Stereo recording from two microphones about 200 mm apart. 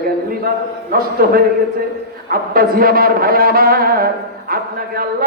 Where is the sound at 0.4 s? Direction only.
50° right (ahead or behind).